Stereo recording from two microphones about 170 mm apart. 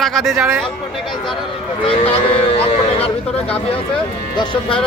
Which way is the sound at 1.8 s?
35° left (ahead or behind).